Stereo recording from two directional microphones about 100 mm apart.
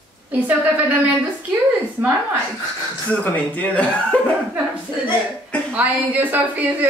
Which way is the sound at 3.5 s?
15° left (ahead or behind).